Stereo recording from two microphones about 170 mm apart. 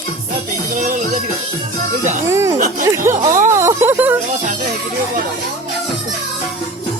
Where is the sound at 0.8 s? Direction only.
45° right (ahead or behind).